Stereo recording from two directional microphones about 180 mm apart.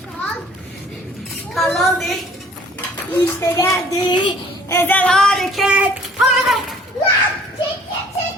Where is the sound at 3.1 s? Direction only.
15° left (ahead or behind).